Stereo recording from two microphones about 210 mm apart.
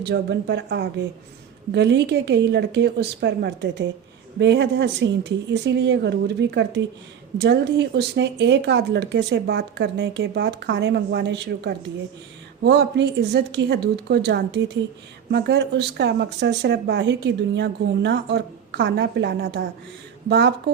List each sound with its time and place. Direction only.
0.0 s a woman's voice: 55° right (ahead or behind)